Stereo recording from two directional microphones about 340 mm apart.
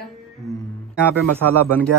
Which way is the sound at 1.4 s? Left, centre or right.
Centre.